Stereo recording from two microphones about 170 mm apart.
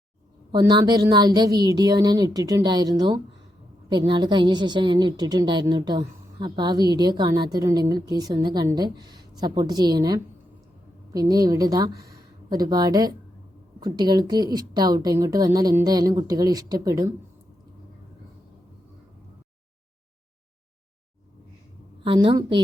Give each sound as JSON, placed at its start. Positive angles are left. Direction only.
{"t": 0.5, "sound": "a woman's voice", "side_deg": -25}
{"t": 22.0, "sound": "a woman's voice", "side_deg": -30}